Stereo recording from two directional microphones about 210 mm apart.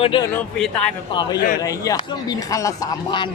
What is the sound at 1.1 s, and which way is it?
A man's voice, 20° left (ahead or behind).